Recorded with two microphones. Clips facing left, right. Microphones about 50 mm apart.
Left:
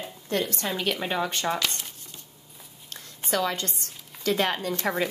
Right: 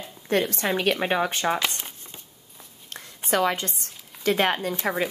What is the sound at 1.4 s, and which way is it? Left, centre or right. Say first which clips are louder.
Speech: right 3 dB; centre.